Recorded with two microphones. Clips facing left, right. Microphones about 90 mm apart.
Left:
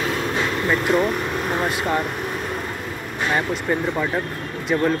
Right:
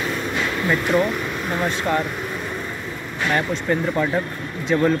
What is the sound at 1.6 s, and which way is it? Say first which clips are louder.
Speech: right 2 dB; 10° left (ahead or behind).